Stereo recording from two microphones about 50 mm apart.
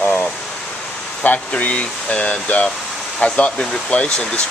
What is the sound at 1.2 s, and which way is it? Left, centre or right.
Speech, left.